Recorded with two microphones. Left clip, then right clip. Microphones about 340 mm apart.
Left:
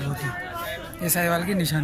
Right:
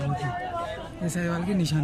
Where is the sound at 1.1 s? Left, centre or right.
Centre.